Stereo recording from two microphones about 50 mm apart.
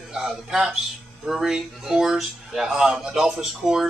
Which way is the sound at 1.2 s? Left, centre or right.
Centre.